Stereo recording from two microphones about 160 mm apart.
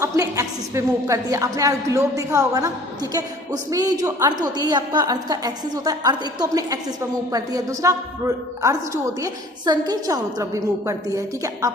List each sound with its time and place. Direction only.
0.0 s a woman's voice: 20° right (ahead or behind)